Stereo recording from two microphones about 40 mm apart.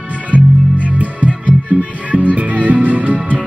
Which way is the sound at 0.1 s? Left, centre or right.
Right.